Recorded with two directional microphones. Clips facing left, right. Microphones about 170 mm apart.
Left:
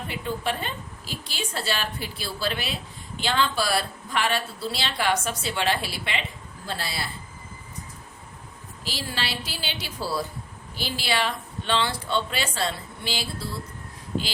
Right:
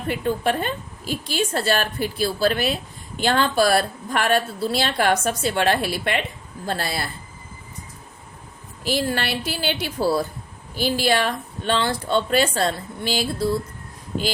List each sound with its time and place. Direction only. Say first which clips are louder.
0.1 s a woman's voice: right 8 dB; 50° right (ahead or behind)
8.8 s a woman's voice: right 9 dB; 55° right (ahead or behind)